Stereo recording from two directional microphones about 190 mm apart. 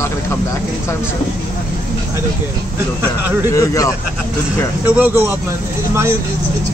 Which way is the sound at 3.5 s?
15° left (ahead or behind).